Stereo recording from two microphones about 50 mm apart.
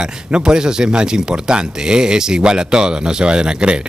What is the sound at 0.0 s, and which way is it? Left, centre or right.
Speech, centre.